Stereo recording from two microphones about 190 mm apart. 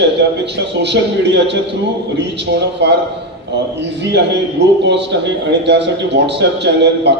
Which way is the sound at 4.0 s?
65° right (ahead or behind).